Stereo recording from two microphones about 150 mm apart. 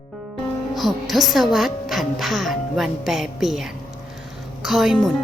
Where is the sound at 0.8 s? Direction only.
Centre (ahead or behind).